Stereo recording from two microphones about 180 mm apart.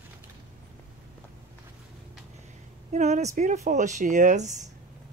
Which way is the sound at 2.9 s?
40° right (ahead or behind).